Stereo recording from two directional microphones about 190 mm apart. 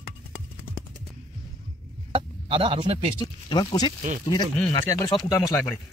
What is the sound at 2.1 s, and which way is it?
Speech, 30° right (ahead or behind).